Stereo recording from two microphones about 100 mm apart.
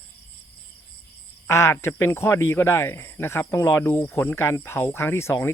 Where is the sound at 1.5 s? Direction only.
30° left (ahead or behind).